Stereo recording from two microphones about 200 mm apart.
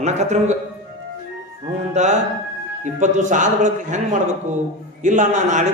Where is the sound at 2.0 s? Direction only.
35° right (ahead or behind).